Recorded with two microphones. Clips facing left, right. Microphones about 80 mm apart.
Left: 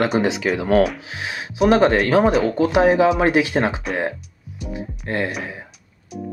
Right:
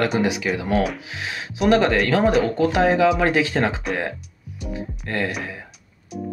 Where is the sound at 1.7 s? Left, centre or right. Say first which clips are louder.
Left 2 dB; left.